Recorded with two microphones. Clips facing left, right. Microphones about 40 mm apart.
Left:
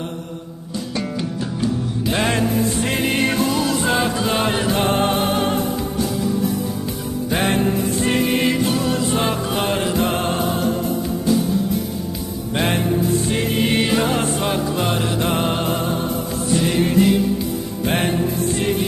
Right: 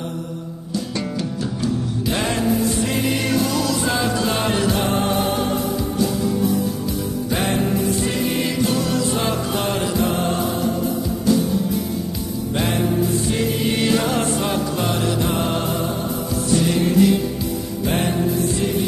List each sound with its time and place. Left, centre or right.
2.1 s music: left
4.2 s music: centre
4.7 s music: left
7.3 s music: left
8.7 s music: left
10.0 s music: left
12.5 s music: left
13.8 s music: left
17.8 s music: left